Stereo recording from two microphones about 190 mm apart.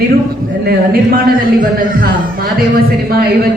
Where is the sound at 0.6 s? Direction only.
55° right (ahead or behind).